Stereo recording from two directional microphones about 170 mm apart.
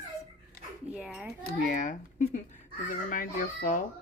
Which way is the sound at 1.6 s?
50° left (ahead or behind).